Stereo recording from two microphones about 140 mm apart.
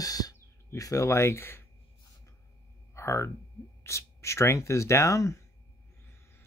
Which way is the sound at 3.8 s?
20° left (ahead or behind).